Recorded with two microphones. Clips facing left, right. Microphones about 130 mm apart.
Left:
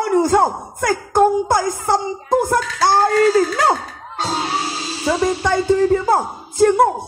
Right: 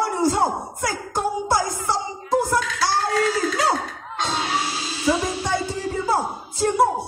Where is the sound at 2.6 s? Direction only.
50° left (ahead or behind).